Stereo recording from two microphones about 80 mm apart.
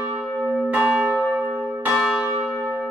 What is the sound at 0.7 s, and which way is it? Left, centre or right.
Church bell, centre.